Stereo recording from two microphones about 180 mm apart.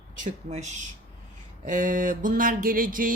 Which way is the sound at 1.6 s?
45° right (ahead or behind).